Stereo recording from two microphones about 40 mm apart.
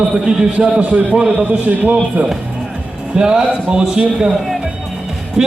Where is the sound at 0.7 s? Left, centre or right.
Right.